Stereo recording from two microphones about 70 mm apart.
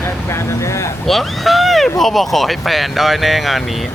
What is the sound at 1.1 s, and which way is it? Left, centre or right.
Speech, centre.